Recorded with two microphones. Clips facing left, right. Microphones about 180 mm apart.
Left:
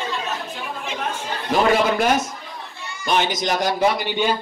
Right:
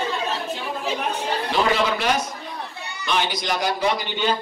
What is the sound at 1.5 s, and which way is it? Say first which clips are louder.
A man's voice: left 5 dB; 50° left (ahead or behind).